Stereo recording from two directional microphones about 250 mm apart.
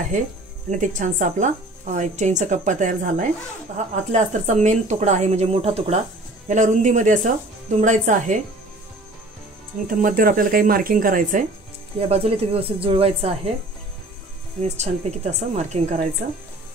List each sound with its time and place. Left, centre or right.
0.7 s speech: right
9.8 s speech: right
14.6 s speech: right